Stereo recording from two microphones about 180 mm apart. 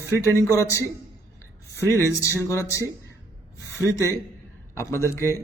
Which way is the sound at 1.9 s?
15° left (ahead or behind).